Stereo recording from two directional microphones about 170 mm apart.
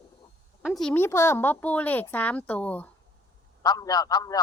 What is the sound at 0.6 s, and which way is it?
Speech, centre (ahead or behind).